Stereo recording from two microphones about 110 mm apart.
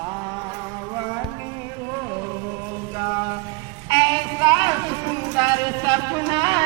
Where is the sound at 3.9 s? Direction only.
35° right (ahead or behind).